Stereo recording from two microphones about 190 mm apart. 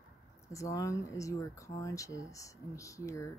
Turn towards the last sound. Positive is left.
turn(degrees=15)  # may be behind; listen again after turning